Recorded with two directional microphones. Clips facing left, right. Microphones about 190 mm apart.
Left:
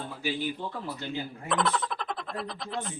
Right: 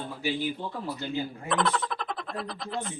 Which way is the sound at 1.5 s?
Centre (ahead or behind).